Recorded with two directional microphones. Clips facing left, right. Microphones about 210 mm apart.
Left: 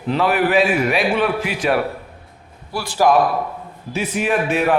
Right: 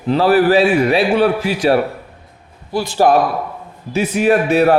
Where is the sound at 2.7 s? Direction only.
25° right (ahead or behind).